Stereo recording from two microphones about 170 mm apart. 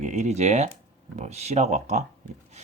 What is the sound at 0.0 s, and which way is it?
Speech, 45° right (ahead or behind).